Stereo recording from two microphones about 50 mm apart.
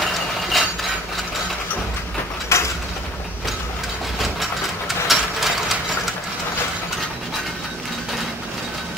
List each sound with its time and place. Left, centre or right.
0.5 s mechanisms: centre
2.5 s mechanisms: left
4.2 s mechanisms: centre